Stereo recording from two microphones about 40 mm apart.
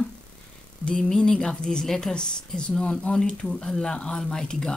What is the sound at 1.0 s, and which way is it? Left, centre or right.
A woman's voice, centre.